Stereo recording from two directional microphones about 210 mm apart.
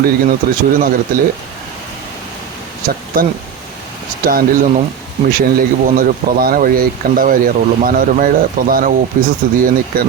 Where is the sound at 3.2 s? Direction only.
40° right (ahead or behind).